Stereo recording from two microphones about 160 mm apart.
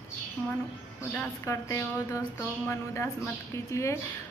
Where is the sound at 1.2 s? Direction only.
20° left (ahead or behind).